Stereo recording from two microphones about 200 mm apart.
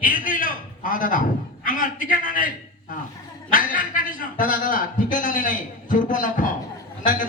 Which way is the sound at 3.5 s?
45° left (ahead or behind).